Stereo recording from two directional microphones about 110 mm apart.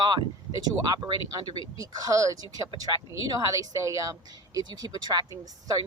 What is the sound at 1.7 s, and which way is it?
Speech, 35° right (ahead or behind).